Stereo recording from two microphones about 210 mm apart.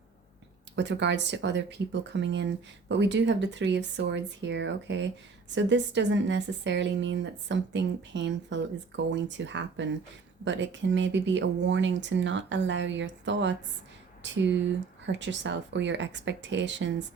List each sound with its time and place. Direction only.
0.8 s speech: 55° right (ahead or behind)